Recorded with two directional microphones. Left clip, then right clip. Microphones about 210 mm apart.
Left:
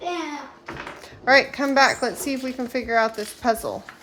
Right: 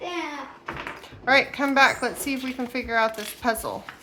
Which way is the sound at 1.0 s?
25° left (ahead or behind).